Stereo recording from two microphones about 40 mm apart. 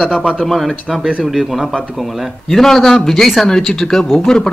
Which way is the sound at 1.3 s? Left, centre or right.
Centre.